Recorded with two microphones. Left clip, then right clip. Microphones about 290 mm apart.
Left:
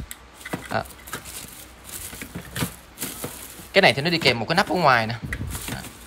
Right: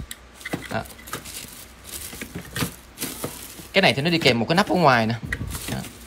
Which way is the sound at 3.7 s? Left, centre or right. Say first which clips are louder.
Left 1 dB; centre.